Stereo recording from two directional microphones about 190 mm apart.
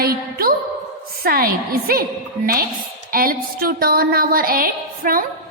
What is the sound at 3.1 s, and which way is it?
A woman's voice, 50° right (ahead or behind).